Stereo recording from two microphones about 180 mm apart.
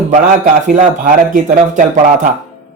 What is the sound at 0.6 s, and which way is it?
Speech, 50° right (ahead or behind).